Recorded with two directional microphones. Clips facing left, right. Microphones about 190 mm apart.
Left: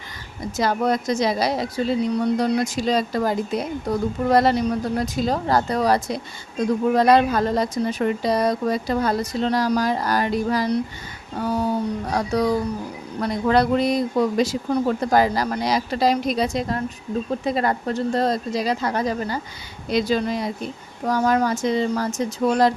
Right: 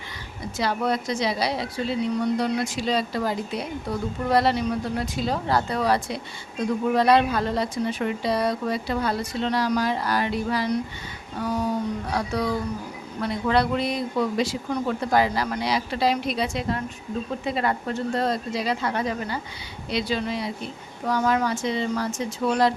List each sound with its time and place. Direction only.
0.5 s a woman's voice: 45° left (ahead or behind)